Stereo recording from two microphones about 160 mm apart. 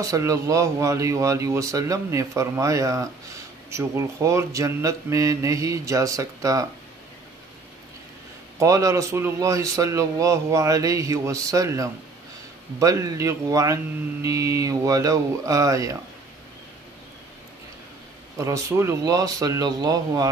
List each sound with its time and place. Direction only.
0.0 s speech: 20° right (ahead or behind)
8.5 s speech: 20° right (ahead or behind)
18.4 s speech: 20° right (ahead or behind)